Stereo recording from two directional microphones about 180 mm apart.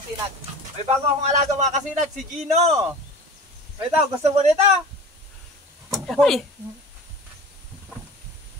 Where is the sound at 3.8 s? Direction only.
35° right (ahead or behind).